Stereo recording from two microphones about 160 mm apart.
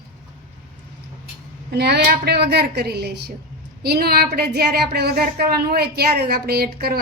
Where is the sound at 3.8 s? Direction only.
75° right (ahead or behind).